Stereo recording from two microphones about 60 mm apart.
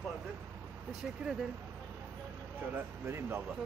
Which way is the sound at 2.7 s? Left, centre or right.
Right.